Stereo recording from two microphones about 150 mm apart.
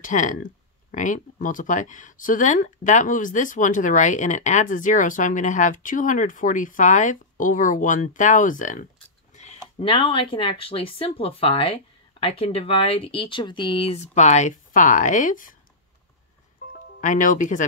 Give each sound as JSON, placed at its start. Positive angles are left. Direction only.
{"t": 0.0, "sound": "speech", "side_deg": 60}
{"t": 9.3, "sound": "a sound", "side_deg": 50}
{"t": 9.8, "sound": "speech", "side_deg": 40}
{"t": 16.7, "sound": "speech", "side_deg": 60}